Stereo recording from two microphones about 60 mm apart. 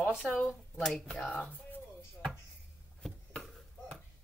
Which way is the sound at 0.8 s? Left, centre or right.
Centre.